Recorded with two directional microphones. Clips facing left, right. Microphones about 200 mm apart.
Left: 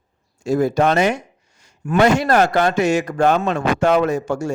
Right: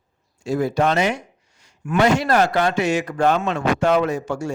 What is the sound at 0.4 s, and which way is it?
A man's voice, 45° left (ahead or behind).